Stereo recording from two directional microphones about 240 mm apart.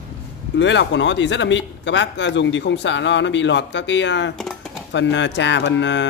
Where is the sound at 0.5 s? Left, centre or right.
Left.